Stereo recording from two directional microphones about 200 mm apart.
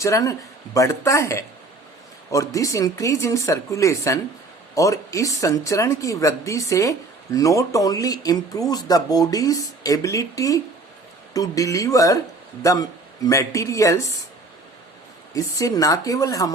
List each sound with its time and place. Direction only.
0.0 s speech: 15° left (ahead or behind)
15.3 s speech: 15° left (ahead or behind)